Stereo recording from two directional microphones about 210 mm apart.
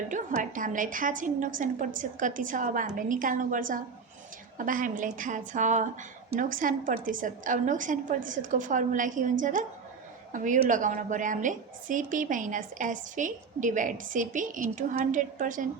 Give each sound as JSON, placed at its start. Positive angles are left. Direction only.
{"t": 0.1, "sound": "a woman's voice", "side_deg": -40}